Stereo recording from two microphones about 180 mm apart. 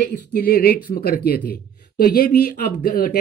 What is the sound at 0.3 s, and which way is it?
Speech, 60° left (ahead or behind).